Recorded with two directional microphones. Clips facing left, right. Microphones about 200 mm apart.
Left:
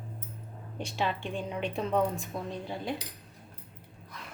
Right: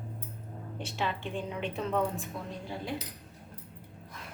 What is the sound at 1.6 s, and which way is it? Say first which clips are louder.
Speech: left 3 dB; 15° left (ahead or behind).